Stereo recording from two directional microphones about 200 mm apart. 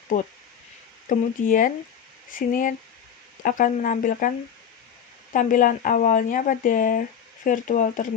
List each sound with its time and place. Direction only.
1.0 s speech: 40° left (ahead or behind)
5.3 s speech: 40° left (ahead or behind)